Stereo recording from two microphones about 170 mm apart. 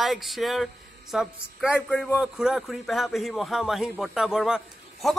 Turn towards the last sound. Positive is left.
turn(degrees=0)  # may be behind; listen again after turning